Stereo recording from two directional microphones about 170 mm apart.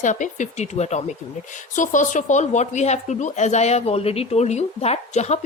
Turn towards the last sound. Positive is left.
turn(degrees=40)  # may be behind; listen again after turning